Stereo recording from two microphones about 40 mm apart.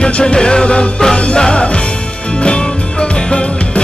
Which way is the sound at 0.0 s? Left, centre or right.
Left.